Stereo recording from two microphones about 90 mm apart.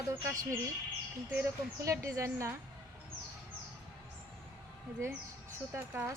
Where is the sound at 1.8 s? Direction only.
35° right (ahead or behind).